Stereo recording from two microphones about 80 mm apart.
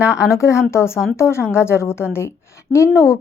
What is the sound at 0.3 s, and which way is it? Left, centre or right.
A woman's voice, left.